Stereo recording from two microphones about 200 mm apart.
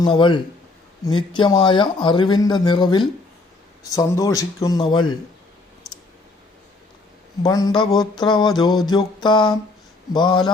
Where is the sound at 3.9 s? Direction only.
15° left (ahead or behind).